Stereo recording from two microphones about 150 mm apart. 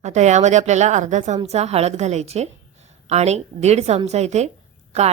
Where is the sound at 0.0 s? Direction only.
50° right (ahead or behind).